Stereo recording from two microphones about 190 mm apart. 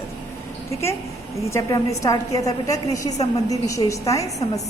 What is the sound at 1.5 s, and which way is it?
A woman's voice, 15° left (ahead or behind).